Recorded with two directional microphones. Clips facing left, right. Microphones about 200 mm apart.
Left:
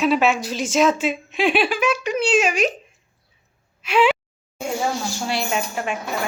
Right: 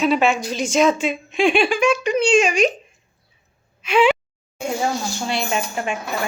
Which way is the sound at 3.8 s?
Centre (ahead or behind).